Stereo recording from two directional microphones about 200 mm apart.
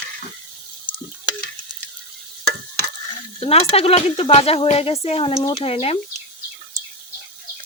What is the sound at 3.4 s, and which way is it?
Speech, 30° left (ahead or behind).